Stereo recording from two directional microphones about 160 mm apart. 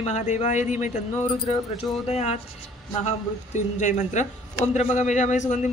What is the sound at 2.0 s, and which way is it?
A man's voice, 40° left (ahead or behind).